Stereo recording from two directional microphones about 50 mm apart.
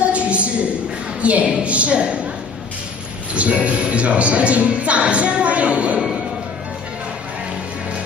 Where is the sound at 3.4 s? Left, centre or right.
Right.